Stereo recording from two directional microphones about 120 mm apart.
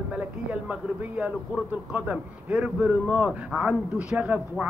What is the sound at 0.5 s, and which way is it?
A man's voice, 10° right (ahead or behind).